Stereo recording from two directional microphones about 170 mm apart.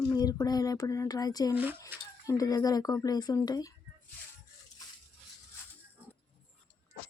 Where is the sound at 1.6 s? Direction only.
10° right (ahead or behind).